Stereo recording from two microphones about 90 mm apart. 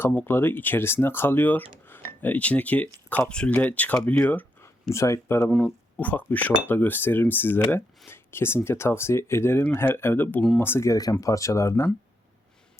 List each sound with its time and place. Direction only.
0.0 s speech: 20° left (ahead or behind)
4.6 s speech: 35° left (ahead or behind)
5.4 s speech: 10° left (ahead or behind); by 11.9 s 35° left (ahead or behind)